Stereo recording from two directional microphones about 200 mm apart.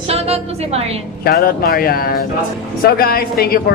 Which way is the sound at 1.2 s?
50° left (ahead or behind).